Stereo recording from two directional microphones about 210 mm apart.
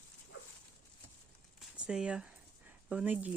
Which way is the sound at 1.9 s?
5° right (ahead or behind).